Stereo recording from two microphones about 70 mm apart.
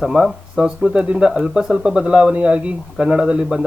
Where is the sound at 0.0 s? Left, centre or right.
Centre.